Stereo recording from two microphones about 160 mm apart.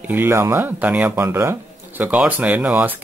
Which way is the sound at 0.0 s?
15° right (ahead or behind).